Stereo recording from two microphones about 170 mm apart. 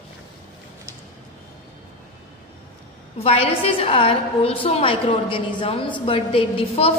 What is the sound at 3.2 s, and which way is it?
A woman's voice, 35° left (ahead or behind).